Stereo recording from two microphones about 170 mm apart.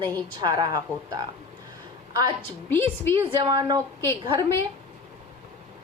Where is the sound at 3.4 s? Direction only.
25° right (ahead or behind).